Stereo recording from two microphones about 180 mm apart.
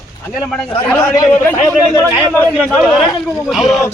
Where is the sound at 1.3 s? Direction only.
10° left (ahead or behind).